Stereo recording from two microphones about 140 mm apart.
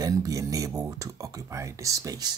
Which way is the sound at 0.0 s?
25° right (ahead or behind).